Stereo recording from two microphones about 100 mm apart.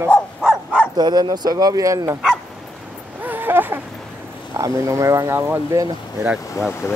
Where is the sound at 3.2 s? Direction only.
20° right (ahead or behind).